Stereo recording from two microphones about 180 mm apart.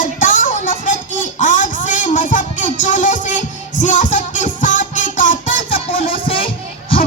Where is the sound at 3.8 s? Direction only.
45° left (ahead or behind).